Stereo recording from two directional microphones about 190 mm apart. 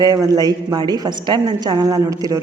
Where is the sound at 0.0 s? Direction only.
20° right (ahead or behind).